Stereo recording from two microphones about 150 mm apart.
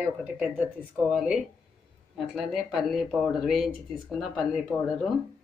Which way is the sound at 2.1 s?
Centre (ahead or behind).